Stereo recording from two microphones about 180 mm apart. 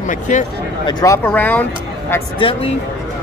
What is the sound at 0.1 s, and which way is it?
Speech, 45° left (ahead or behind).